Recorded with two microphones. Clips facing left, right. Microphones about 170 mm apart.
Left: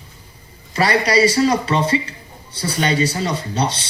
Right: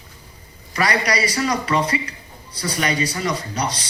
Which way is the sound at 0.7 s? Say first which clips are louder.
Left 4 dB; 30° left (ahead or behind).